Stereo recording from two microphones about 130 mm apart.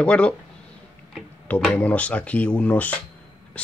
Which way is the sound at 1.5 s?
10° left (ahead or behind).